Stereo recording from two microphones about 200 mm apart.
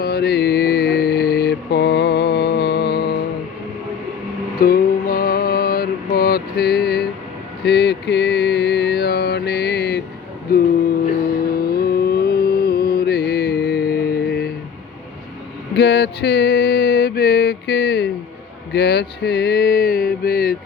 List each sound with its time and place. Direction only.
0.0 s mantra: 50° left (ahead or behind)
4.6 s music: 45° left (ahead or behind)
6.1 s mantra: 50° left (ahead or behind)
10.5 s a sound: 50° left (ahead or behind)
11.5 s music: 50° left (ahead or behind)
15.7 s a sound: 55° left (ahead or behind)
18.7 s mantra: 55° left (ahead or behind)